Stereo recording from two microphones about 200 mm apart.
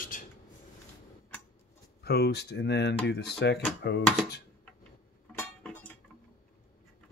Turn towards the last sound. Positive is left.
turn(degrees=5)  # may be behind; listen again after turning